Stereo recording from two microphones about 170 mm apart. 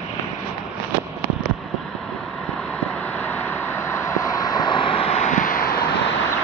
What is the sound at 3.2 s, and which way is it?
Vehicle, 10° left (ahead or behind).